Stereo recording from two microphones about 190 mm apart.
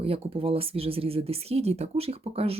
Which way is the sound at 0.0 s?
30° right (ahead or behind).